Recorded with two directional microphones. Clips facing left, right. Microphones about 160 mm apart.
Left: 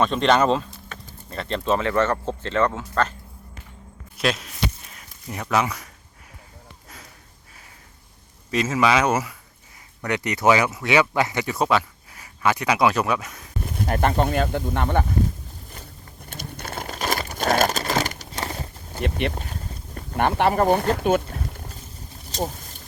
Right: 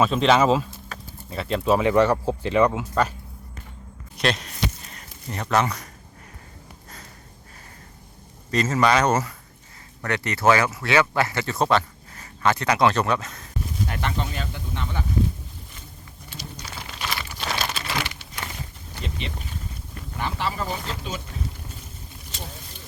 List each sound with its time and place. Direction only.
0.0 s speech: 5° right (ahead or behind)
4.2 s a sound: 5° left (ahead or behind)
8.4 s speech: 5° left (ahead or behind)
13.7 s speech: 45° left (ahead or behind)
16.3 s crumpling: 55° left (ahead or behind)
19.0 s speech: 60° left (ahead or behind)
22.3 s a sound: 40° left (ahead or behind)